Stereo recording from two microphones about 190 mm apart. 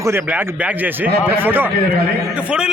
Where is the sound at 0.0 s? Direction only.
10° right (ahead or behind).